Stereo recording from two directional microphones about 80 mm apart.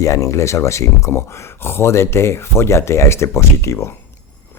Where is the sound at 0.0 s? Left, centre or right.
Left.